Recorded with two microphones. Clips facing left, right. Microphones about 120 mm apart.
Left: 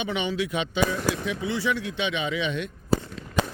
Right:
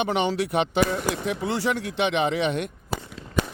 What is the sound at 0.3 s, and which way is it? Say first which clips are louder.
Speech: right 4 dB; 60° right (ahead or behind).